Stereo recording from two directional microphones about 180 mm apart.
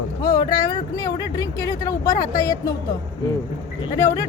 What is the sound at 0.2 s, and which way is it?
Vehicle, 20° left (ahead or behind).